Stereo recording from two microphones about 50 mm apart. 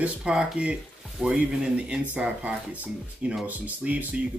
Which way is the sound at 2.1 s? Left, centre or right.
Right.